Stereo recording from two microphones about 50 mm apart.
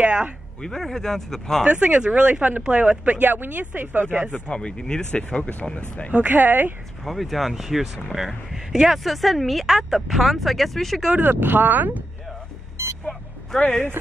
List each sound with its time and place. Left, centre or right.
0.0 s a sound: right
0.6 s speech: centre
1.6 s speech: right
3.3 s speech: right
4.3 s speech: centre
6.1 s speech: right
7.1 s speech: centre
11.2 s speech: right
13.5 s speech: centre